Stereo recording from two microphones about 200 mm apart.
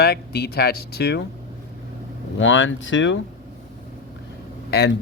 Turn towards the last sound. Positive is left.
turn(degrees=55)  # may be behind; listen again after turning